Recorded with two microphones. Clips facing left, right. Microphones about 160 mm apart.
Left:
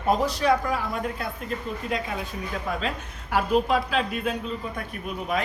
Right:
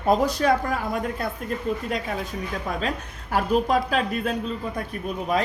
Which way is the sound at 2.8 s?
45° right (ahead or behind).